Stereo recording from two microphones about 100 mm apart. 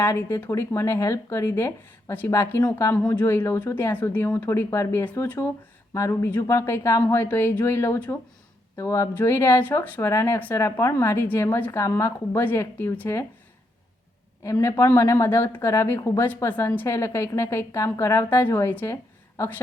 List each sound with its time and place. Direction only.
0.0 s a woman's voice: 25° left (ahead or behind)
8.7 s a woman's voice: 30° left (ahead or behind)
14.4 s a woman's voice: 25° left (ahead or behind)